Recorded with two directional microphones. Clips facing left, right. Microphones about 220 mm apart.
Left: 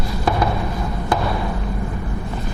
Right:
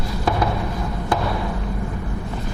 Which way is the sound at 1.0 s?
15° left (ahead or behind).